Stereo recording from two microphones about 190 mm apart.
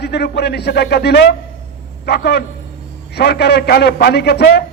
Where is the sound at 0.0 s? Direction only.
60° left (ahead or behind).